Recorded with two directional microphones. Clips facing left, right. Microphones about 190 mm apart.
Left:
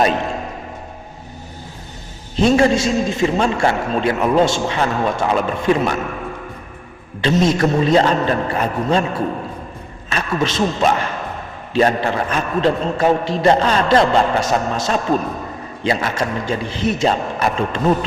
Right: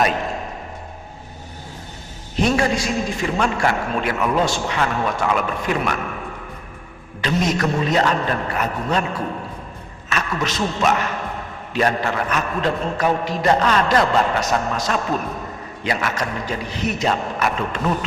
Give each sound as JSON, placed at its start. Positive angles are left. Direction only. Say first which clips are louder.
{"t": 2.4, "sound": "a man's voice", "louder": "left 5 dB", "side_deg": 25}
{"t": 7.2, "sound": "a man's voice", "louder": "left 5 dB", "side_deg": 30}